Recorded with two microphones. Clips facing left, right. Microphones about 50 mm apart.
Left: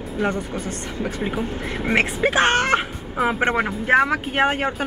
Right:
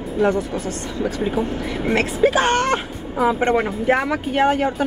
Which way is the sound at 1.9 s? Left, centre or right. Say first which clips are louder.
Right 2 dB; left.